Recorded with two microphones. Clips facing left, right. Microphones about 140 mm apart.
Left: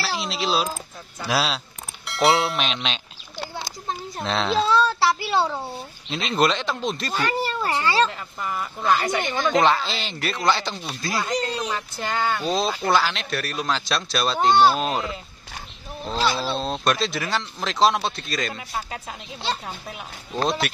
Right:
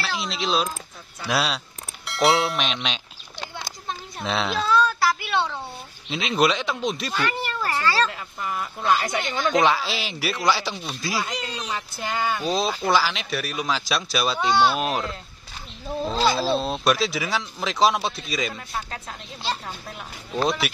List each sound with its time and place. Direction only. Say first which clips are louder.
0.0 s speech: left 1 dB; centre (ahead or behind)
4.2 s speech: left 1 dB; centre (ahead or behind)
4.5 s a sound: left 2 dB; 30° left (ahead or behind)
6.0 s speech: even; centre (ahead or behind)
7.2 s a child's voice: left 2 dB; 35° left (ahead or behind)
8.1 s speech: left 1 dB; 5° right (ahead or behind)
14.4 s speech: left 4 dB; 40° left (ahead or behind)
14.8 s speech: even; centre (ahead or behind)
16.2 s speech: right 1 dB; 35° right (ahead or behind)
16.5 s speech: right 2 dB; centre (ahead or behind)
20.6 s speech: even; 5° right (ahead or behind)